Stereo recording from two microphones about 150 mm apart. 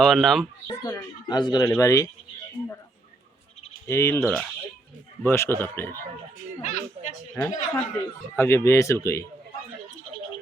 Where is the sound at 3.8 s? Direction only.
15° left (ahead or behind).